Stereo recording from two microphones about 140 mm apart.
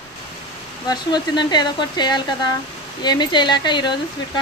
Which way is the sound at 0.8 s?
30° left (ahead or behind).